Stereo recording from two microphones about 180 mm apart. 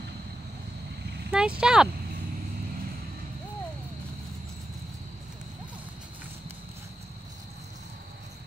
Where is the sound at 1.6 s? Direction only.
5° right (ahead or behind).